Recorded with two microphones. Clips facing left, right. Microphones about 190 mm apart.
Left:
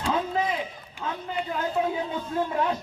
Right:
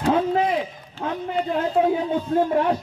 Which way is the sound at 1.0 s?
40° right (ahead or behind).